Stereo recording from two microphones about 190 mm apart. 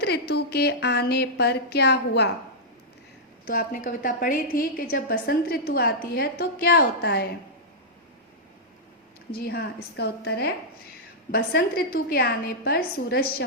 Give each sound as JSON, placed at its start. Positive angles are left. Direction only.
{"t": 0.0, "sound": "a woman's voice", "side_deg": 60}
{"t": 3.4, "sound": "a woman's voice", "side_deg": 50}
{"t": 9.4, "sound": "a woman's voice", "side_deg": 55}